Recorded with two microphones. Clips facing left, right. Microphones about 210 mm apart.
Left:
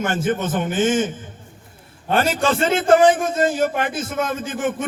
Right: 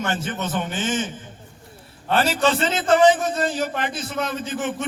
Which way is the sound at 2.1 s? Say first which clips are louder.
Left 1 dB; 50° left (ahead or behind).